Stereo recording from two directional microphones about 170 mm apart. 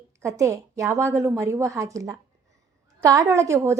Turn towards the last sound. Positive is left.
turn(degrees=-15)  # may be behind; listen again after turning